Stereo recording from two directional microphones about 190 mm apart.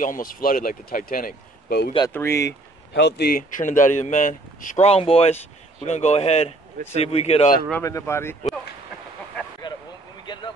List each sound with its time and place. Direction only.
0.0 s speech: 45° left (ahead or behind)
2.0 s speech: 15° left (ahead or behind)
2.9 s speech: 60° left (ahead or behind); by 7.5 s 35° left (ahead or behind)
7.7 s speech: 15° left (ahead or behind)
10.2 s a sound: 25° left (ahead or behind)